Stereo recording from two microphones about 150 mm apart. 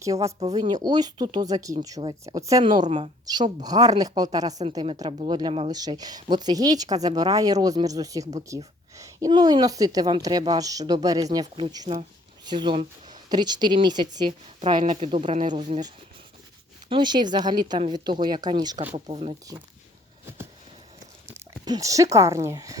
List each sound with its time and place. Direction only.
0.0 s a woman's voice: 20° right (ahead or behind)
15.2 s speech: 50° right (ahead or behind)
15.5 s a woman's voice: 35° right (ahead or behind)
16.9 s speech: 30° right (ahead or behind)
19.0 s a woman's voice: 40° right (ahead or behind)
21.6 s speech: 25° right (ahead or behind)